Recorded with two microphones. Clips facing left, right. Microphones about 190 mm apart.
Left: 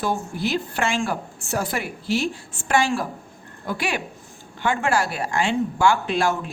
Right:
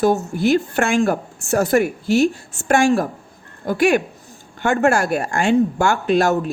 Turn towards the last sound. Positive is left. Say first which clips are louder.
# right 6 dB
turn(degrees=-45)  # may be behind; listen again after turning